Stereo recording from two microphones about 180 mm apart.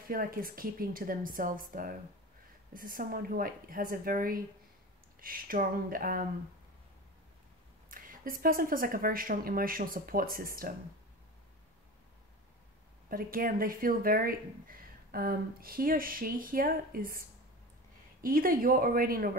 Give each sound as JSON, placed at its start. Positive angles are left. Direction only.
{"t": 0.1, "sound": "speech", "side_deg": -55}
{"t": 7.9, "sound": "speech", "side_deg": -50}
{"t": 13.1, "sound": "speech", "side_deg": -50}
{"t": 18.2, "sound": "speech", "side_deg": -50}